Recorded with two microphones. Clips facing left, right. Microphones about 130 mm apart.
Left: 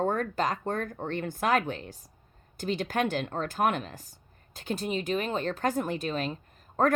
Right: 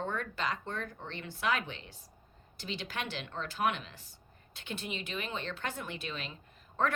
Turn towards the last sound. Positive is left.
turn(degrees=45)  # may be behind; listen again after turning